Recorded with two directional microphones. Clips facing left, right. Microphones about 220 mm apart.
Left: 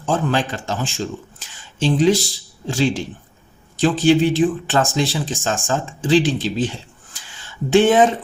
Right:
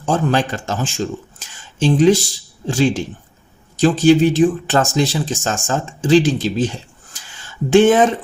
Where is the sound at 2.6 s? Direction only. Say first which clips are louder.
Right 3 dB; 50° right (ahead or behind).